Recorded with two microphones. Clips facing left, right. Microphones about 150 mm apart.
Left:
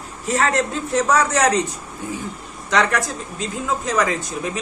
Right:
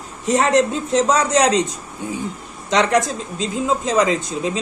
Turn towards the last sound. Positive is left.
turn(degrees=-20)  # may be behind; listen again after turning